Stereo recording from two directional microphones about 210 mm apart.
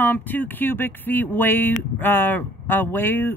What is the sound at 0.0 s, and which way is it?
Speech, 10° left (ahead or behind).